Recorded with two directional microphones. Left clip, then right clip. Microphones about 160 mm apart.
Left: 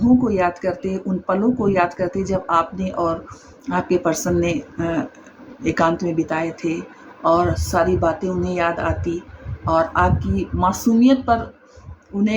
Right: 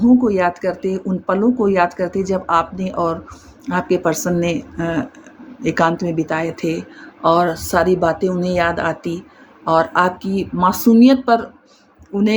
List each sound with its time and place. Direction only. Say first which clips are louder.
0.0 s speech: right 3 dB; 50° right (ahead or behind)